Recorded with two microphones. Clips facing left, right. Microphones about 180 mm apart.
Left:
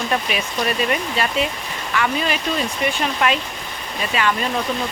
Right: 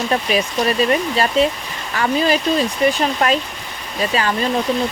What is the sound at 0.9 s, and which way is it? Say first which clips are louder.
Speech: right 4 dB; 35° right (ahead or behind).